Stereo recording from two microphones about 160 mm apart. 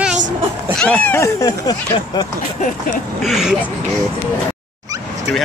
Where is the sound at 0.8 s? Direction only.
5° left (ahead or behind).